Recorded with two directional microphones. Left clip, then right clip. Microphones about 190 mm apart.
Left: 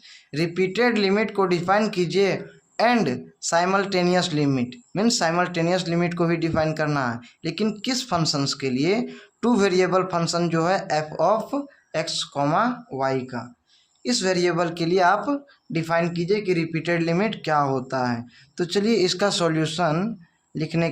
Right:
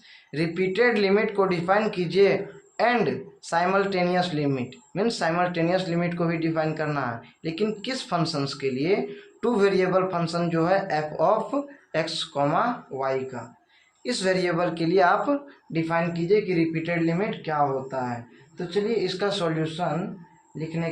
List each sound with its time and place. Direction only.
0.3 s speech: 30° left (ahead or behind)
14.0 s speech: 25° left (ahead or behind)
15.8 s a man's voice: 40° left (ahead or behind); by 20.9 s 55° left (ahead or behind)